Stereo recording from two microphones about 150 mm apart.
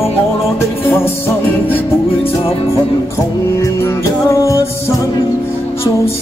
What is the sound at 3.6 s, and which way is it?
Music, 20° left (ahead or behind).